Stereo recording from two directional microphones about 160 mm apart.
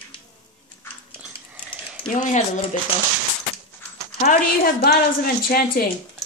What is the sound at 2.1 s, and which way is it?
Speech, 50° left (ahead or behind).